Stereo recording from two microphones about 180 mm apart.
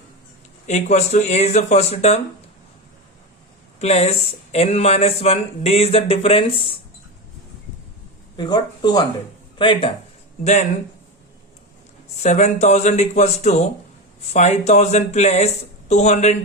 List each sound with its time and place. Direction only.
0.7 s speech: 40° left (ahead or behind)
3.8 s speech: 35° left (ahead or behind)
8.4 s speech: 25° left (ahead or behind)
10.4 s speech: 40° left (ahead or behind)
12.2 s speech: 40° left (ahead or behind)